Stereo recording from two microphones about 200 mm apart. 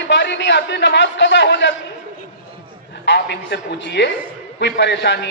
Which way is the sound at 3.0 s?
60° left (ahead or behind).